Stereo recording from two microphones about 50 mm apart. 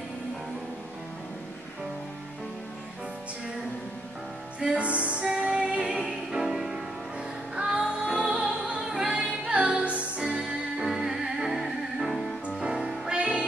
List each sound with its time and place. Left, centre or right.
4.6 s music: right
10.8 s music: centre
12.5 s music: centre